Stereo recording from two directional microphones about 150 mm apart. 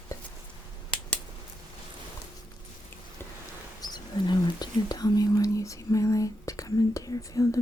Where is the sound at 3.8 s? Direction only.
30° left (ahead or behind).